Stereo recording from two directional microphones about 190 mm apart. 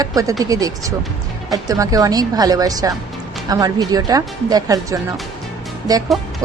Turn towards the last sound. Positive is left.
turn(degrees=-20)  # may be behind; listen again after turning